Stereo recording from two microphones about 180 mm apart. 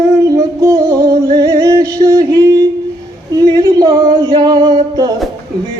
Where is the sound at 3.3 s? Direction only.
20° right (ahead or behind).